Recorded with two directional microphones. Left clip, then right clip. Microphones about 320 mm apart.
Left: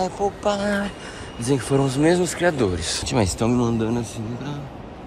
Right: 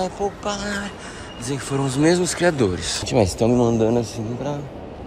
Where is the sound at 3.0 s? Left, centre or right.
Centre.